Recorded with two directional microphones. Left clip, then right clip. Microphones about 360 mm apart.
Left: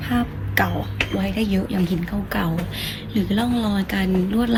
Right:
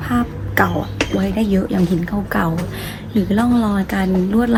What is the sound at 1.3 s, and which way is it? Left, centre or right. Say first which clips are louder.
Speech: right 5 dB; centre.